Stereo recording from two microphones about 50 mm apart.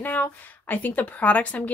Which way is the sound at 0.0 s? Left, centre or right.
Left.